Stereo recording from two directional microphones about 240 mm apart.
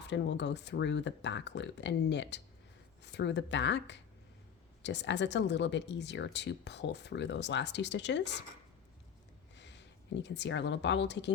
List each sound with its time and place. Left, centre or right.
0.0 s speech: left
9.6 s speech: left